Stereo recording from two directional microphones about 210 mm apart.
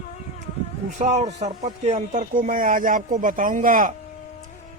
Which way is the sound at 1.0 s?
30° right (ahead or behind).